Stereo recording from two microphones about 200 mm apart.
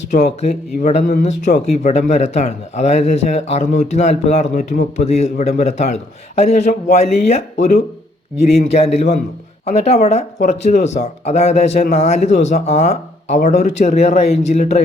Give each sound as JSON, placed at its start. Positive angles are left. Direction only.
{"t": 0.1, "sound": "speech", "side_deg": 35}